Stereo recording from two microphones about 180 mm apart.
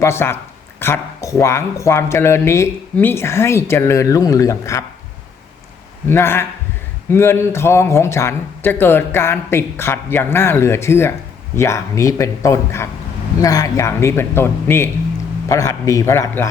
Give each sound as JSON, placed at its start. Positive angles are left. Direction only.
{"t": 0.0, "sound": "speech", "side_deg": 15}
{"t": 6.1, "sound": "speech", "side_deg": 15}